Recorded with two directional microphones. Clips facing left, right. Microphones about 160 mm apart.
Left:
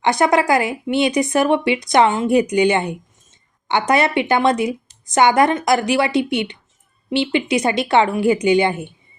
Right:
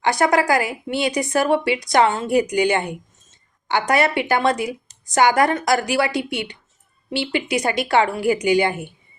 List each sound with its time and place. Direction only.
0.0 s a woman's voice: 20° left (ahead or behind)